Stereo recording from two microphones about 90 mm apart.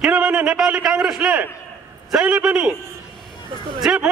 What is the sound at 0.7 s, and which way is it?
A man's voice, 10° right (ahead or behind).